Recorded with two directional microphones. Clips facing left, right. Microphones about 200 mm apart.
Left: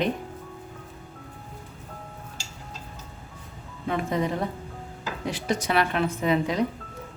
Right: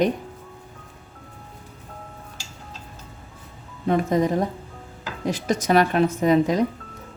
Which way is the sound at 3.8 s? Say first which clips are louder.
Right 6 dB; 40° right (ahead or behind).